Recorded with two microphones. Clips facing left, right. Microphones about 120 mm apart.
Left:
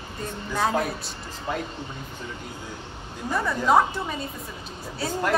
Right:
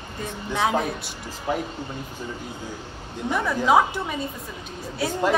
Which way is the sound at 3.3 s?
Centre (ahead or behind).